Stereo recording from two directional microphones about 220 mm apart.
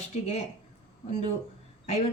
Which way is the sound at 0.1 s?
30° left (ahead or behind).